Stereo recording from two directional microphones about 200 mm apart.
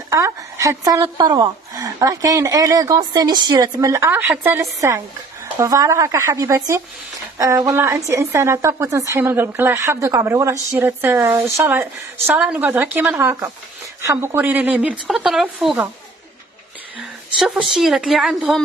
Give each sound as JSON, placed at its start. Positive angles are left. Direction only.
{"t": 0.1, "sound": "a woman's voice", "side_deg": -15}
{"t": 17.4, "sound": "speech", "side_deg": 0}